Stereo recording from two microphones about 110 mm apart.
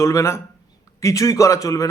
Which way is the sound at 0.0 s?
30° left (ahead or behind).